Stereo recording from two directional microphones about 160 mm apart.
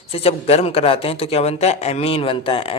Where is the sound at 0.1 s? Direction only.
40° left (ahead or behind).